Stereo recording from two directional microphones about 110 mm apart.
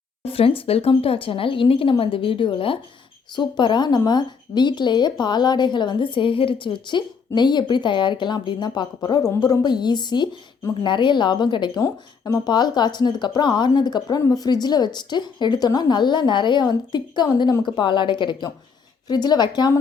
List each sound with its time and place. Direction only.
0.3 s speech: 60° left (ahead or behind)
11.8 s speech: 30° left (ahead or behind)